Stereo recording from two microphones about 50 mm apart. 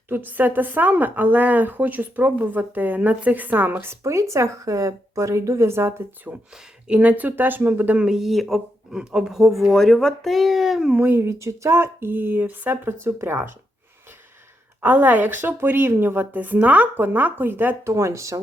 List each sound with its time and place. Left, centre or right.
0.1 s a woman's voice: right
4.0 s speech: right
6.3 s a woman's voice: right
7.9 s speech: centre
8.2 s speech: centre
8.9 s speech: centre
10.9 s a woman's voice: right
11.2 s speech: right
14.8 s a woman's voice: right
17.8 s speech: right